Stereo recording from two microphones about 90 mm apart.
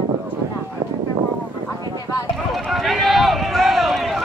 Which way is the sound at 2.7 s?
Centre (ahead or behind).